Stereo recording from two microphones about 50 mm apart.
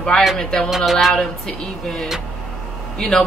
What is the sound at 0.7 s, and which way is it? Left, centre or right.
Speech, centre.